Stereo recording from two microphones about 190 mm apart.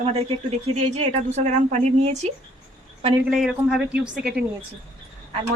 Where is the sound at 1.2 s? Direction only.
35° right (ahead or behind).